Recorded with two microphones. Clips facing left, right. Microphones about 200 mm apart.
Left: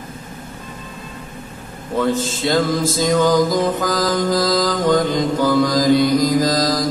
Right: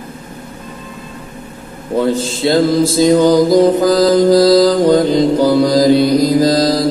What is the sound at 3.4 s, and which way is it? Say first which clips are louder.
Mantra: right 9 dB; 35° right (ahead or behind).